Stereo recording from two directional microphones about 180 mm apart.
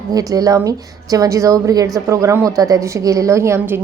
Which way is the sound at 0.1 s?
20° right (ahead or behind).